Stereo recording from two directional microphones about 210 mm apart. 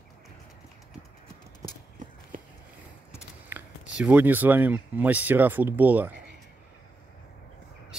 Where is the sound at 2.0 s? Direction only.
35° right (ahead or behind).